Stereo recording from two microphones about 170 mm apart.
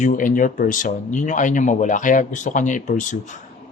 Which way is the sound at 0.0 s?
50° left (ahead or behind).